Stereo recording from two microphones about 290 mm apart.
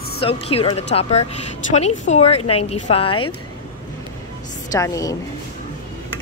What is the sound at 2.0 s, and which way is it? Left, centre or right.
Speech, left.